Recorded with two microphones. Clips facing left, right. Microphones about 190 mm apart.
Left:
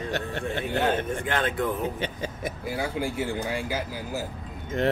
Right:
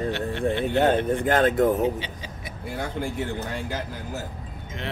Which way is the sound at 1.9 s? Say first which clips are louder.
Left 4 dB; 50° left (ahead or behind).